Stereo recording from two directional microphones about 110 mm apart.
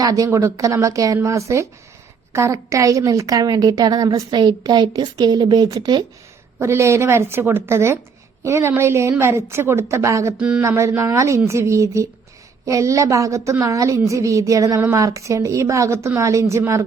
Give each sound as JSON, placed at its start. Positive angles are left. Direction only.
{"t": 0.0, "sound": "a woman's voice", "side_deg": -35}
{"t": 10.3, "sound": "a sound", "side_deg": -10}
{"t": 10.6, "sound": "a woman's voice", "side_deg": -25}